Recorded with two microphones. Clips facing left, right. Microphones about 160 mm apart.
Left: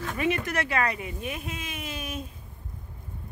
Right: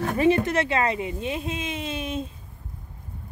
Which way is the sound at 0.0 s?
35° right (ahead or behind).